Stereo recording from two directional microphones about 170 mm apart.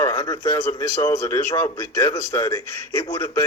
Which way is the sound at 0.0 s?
25° left (ahead or behind).